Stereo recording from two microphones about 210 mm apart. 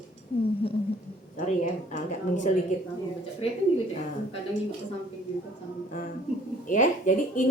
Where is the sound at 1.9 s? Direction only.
35° left (ahead or behind).